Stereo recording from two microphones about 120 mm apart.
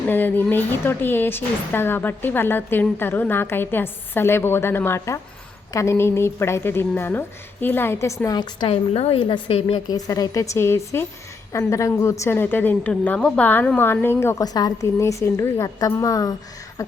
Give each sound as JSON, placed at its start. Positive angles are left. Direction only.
{"t": 0.1, "sound": "a woman's voice", "side_deg": 15}
{"t": 8.6, "sound": "a woman's voice", "side_deg": 55}
{"t": 9.6, "sound": "a woman's voice", "side_deg": 55}
{"t": 9.9, "sound": "a woman's voice", "side_deg": 30}